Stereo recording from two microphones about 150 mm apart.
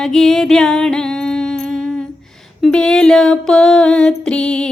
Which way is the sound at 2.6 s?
5° left (ahead or behind).